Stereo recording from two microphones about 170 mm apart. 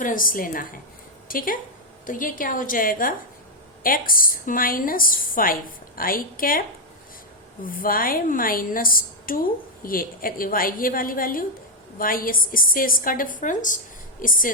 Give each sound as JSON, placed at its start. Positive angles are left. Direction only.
{"t": 0.0, "sound": "a woman's voice", "side_deg": 55}